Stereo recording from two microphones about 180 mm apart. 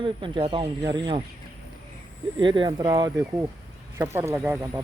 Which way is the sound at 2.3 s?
25° right (ahead or behind).